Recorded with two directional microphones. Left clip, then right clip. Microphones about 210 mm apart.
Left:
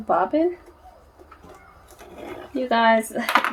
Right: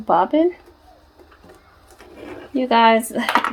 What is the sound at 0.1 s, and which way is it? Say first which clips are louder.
Speech: right 4 dB; 55° right (ahead or behind).